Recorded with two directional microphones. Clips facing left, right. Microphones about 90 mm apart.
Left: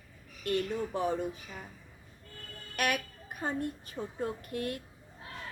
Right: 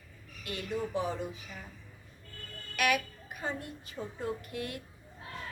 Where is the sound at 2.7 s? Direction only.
45° left (ahead or behind).